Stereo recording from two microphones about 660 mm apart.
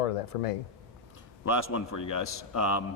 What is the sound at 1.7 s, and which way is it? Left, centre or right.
Speech, left.